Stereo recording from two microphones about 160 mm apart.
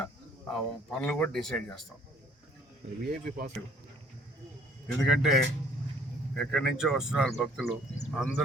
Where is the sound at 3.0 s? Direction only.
70° right (ahead or behind).